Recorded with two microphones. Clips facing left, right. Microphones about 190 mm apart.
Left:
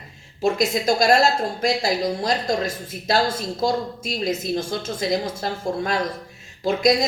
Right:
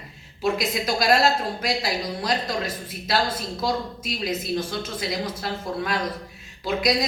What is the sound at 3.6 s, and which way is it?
A woman's voice, 45° left (ahead or behind).